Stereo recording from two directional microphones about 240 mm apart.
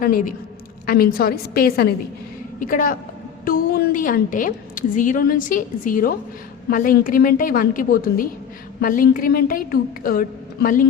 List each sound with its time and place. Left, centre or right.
0.0 s a woman's voice: left